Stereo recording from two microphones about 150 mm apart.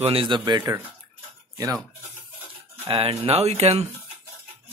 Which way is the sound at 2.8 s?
35° right (ahead or behind).